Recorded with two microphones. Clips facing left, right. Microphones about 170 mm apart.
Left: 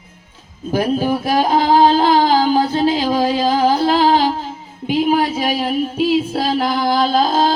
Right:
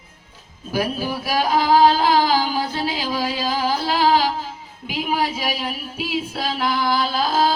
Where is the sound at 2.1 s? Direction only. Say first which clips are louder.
Left 5 dB; 50° left (ahead or behind).